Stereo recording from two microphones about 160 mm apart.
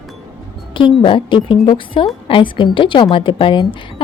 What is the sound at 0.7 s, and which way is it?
Speech, 30° left (ahead or behind).